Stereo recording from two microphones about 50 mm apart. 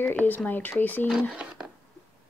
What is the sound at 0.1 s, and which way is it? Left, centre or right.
Speech, left.